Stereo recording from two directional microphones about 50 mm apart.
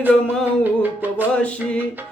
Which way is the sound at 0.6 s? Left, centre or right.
Right.